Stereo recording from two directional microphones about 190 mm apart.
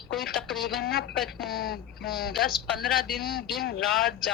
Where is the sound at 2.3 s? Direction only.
Centre (ahead or behind).